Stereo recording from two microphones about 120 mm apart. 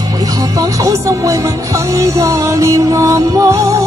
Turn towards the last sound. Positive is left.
turn(degrees=-25)  # may be behind; listen again after turning